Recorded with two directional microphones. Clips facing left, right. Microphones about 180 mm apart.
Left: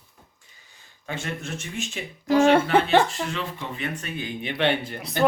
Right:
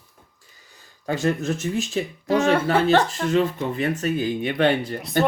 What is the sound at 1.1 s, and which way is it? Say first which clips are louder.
Speech: right 9 dB; 40° right (ahead or behind).